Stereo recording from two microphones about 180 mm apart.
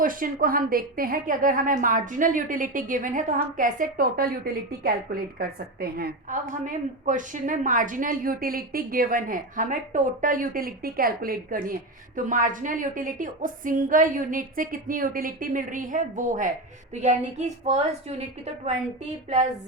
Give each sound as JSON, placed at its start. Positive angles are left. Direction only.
{"t": 0.0, "sound": "a woman's voice", "side_deg": -50}